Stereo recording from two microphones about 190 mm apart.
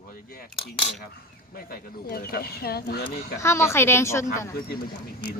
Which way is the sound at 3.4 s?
15° left (ahead or behind).